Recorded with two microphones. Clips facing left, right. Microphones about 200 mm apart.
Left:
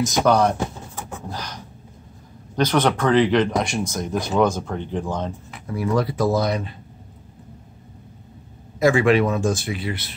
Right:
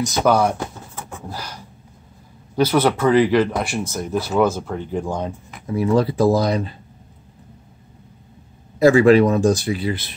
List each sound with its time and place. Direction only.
0.2 s speech: 5° right (ahead or behind)
5.7 s speech: 25° right (ahead or behind)
8.7 s speech: 35° right (ahead or behind)